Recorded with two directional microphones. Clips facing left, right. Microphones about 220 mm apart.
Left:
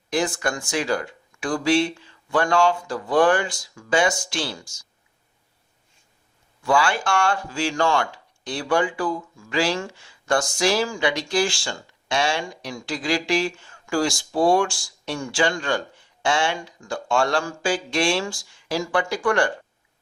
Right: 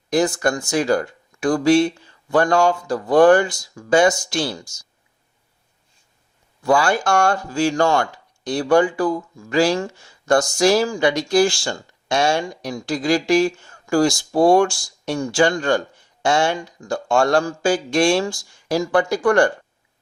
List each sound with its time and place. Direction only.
0.1 s speech: 40° right (ahead or behind)
6.6 s speech: 40° right (ahead or behind)